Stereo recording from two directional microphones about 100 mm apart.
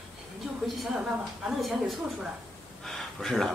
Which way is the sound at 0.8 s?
5° right (ahead or behind).